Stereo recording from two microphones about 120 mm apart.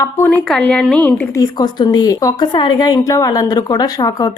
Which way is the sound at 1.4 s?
35° left (ahead or behind).